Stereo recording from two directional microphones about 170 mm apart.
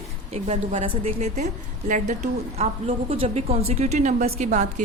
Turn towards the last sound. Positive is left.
turn(degrees=-40)  # may be behind; listen again after turning